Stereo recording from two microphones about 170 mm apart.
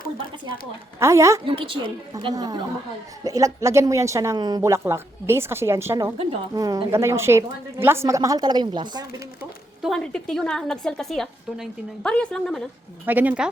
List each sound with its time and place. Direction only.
0.9 s speech: 15° right (ahead or behind)
1.5 s a woman's voice: 30° right (ahead or behind)
9.8 s a woman's voice: centre (ahead or behind)
13.1 s speech: 10° right (ahead or behind)